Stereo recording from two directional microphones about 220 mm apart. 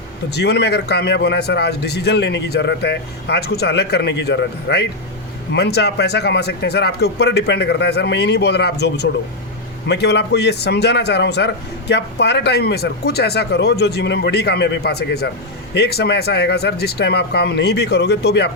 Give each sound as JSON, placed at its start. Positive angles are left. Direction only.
{"t": 0.3, "sound": "a man's voice", "side_deg": 50}